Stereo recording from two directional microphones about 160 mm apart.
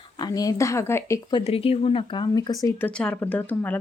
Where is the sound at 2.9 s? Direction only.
5° left (ahead or behind).